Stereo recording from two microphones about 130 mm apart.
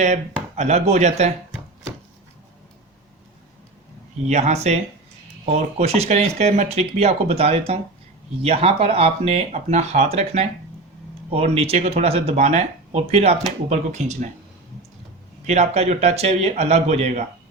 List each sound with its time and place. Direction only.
0.0 s speech: 65° right (ahead or behind)
4.3 s speech: 60° right (ahead or behind)
15.4 s speech: 55° right (ahead or behind)